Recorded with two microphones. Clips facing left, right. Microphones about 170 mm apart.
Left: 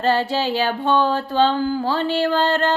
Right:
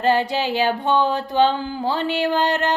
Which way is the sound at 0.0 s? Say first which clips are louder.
Even; 15° right (ahead or behind).